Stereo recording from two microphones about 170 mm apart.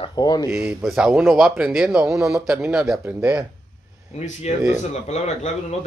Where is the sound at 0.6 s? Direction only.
5° right (ahead or behind).